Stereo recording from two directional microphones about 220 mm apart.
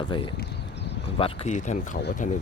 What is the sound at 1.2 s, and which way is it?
Speech, 35° left (ahead or behind).